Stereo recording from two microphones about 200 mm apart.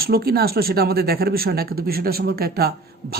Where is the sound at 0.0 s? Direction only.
50° right (ahead or behind).